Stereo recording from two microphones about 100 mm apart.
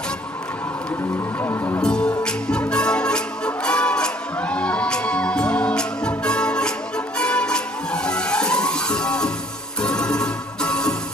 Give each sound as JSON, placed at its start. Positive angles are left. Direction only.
{"t": 1.4, "sound": "speech", "side_deg": 25}
{"t": 1.8, "sound": "music", "side_deg": 10}